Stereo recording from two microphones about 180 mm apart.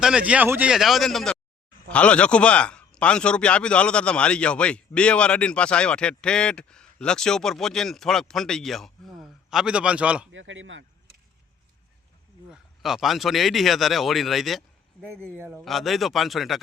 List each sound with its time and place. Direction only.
0.0 s a man's voice: 5° right (ahead or behind)
10.3 s a man's voice: 90° right
12.5 s a man's voice: centre (ahead or behind)
15.4 s a man's voice: 10° right (ahead or behind)
15.6 s a man's voice: centre (ahead or behind)